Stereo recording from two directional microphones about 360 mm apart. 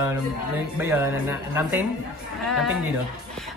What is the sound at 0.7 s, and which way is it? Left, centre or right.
A woman's voice, centre.